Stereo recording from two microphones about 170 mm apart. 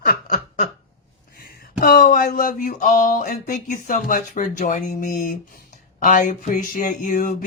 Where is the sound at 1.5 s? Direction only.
60° left (ahead or behind).